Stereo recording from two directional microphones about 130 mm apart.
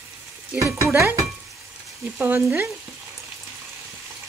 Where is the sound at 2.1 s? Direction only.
15° right (ahead or behind).